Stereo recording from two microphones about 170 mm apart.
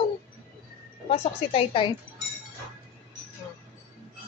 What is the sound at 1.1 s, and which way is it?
Speech, 30° left (ahead or behind).